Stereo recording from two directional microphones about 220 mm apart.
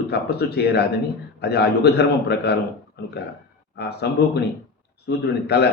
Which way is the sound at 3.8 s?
50° left (ahead or behind).